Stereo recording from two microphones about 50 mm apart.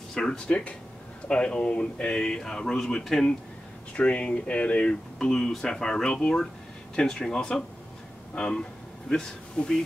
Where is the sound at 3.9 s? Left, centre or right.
Left.